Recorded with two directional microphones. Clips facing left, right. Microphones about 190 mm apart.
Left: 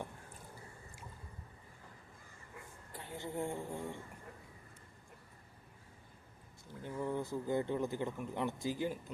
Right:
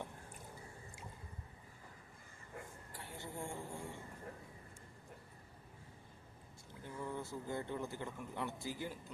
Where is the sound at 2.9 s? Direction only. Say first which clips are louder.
Left 7 dB; 20° left (ahead or behind).